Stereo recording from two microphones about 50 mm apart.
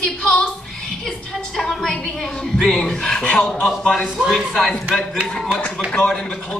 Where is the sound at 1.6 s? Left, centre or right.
Centre.